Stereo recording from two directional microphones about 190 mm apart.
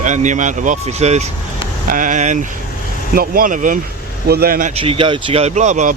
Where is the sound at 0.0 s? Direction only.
40° right (ahead or behind).